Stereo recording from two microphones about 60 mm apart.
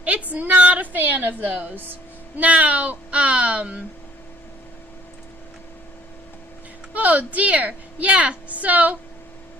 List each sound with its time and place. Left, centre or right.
0.0 s a woman's voice: right
6.9 s a woman's voice: right